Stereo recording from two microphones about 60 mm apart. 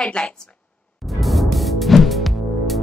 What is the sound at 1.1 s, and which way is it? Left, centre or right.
Music, centre.